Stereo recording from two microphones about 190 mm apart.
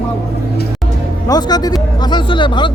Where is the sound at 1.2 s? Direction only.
20° left (ahead or behind).